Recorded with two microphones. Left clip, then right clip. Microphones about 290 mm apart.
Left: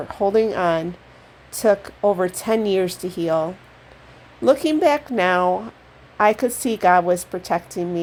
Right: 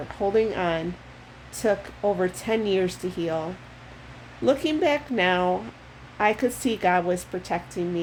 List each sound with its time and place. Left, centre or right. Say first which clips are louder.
0.1 s speech: left 5 dB; left
4.4 s speech: left 6 dB; left